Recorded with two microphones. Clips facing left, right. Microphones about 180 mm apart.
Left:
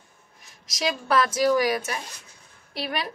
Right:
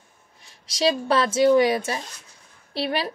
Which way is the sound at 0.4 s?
30° right (ahead or behind).